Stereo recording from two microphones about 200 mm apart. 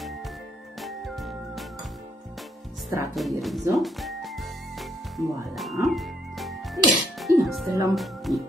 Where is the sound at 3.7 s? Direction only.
Centre (ahead or behind).